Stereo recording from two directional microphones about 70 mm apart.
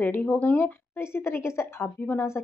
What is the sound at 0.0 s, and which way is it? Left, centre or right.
Speech, left.